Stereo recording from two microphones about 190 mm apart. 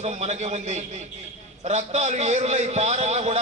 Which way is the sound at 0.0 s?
35° right (ahead or behind).